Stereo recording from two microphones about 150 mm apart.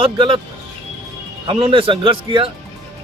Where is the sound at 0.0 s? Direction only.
35° right (ahead or behind).